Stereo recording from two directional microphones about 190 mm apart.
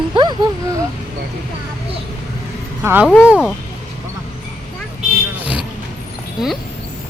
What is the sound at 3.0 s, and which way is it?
Speech, 5° left (ahead or behind).